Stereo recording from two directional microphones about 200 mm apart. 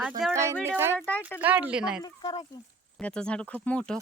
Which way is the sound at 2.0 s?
20° left (ahead or behind).